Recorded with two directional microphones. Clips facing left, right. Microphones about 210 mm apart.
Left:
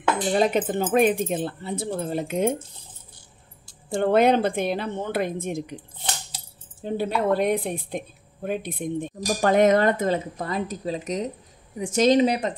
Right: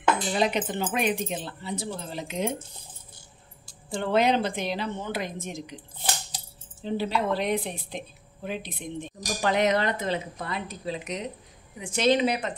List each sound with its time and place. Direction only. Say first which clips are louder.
0.3 s a woman's voice: left 5 dB; 45° left (ahead or behind)
4.0 s a woman's voice: left 5 dB; 55° left (ahead or behind)
6.8 s a woman's voice: left 3 dB; 50° left (ahead or behind)